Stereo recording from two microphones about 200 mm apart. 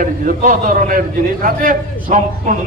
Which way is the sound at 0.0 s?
40° right (ahead or behind).